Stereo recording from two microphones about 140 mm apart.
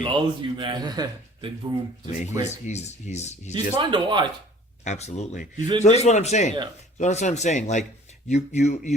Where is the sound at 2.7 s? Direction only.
55° left (ahead or behind).